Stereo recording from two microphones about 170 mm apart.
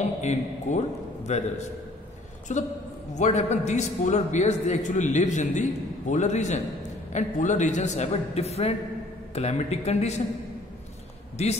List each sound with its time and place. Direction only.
0.2 s a man's voice: 45° left (ahead or behind)
2.5 s a man's voice: 45° left (ahead or behind)